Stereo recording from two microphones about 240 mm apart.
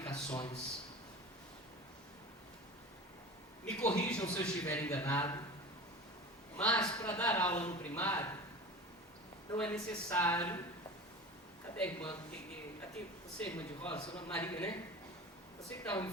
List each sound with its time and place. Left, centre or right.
0.0 s a sound: centre
3.7 s a sound: centre
4.3 s a woman's voice: centre
6.6 s a man's voice: centre
9.6 s a woman's voice: centre
11.8 s a woman's voice: centre
13.4 s a woman's voice: centre
15.8 s a woman's voice: centre